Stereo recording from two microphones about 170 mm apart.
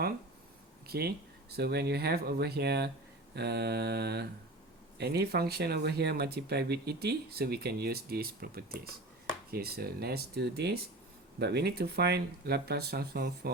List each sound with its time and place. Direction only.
0.9 s speech: 65° right (ahead or behind)